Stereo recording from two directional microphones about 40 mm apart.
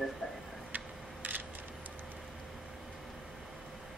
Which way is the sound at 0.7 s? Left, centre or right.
Right.